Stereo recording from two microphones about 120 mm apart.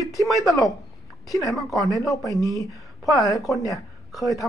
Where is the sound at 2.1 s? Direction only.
30° left (ahead or behind).